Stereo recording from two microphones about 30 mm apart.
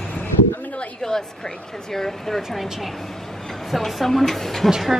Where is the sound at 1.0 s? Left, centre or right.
Centre.